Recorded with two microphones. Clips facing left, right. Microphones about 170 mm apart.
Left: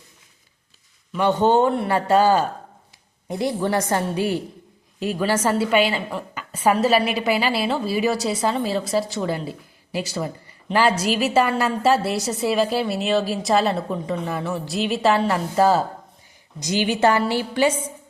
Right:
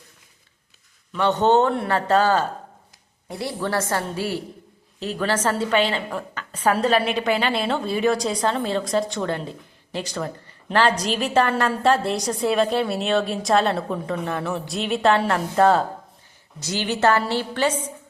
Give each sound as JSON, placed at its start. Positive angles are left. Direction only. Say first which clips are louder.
{"t": 1.1, "sound": "a woman's voice", "louder": "even", "side_deg": 10}
{"t": 16.6, "sound": "a woman's voice", "louder": "left 3 dB", "side_deg": 15}